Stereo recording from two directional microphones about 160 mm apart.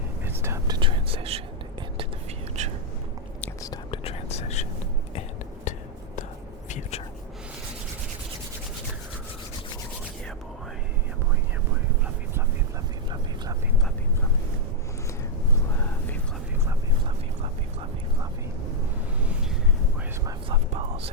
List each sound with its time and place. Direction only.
0.3 s whispering: 15° right (ahead or behind)
0.8 s whispering: 35° right (ahead or behind)
2.6 s a sound: 45° right (ahead or behind)
3.6 s whispering: 25° left (ahead or behind)
4.0 s whispering: 40° left (ahead or behind)
5.7 s whispering: 50° left (ahead or behind)
6.7 s a sound: 50° left (ahead or behind)
13.1 s a sound: 25° right (ahead or behind)
20.7 s whispering: 40° right (ahead or behind)